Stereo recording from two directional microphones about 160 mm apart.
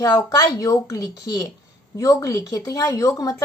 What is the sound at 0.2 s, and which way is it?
Speech, 20° left (ahead or behind).